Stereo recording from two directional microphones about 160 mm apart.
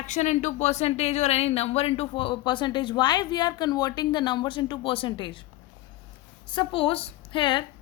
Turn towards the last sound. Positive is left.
turn(degrees=30)  # may be behind; listen again after turning